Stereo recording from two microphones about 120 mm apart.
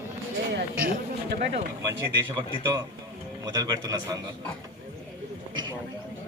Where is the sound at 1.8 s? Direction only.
30° right (ahead or behind).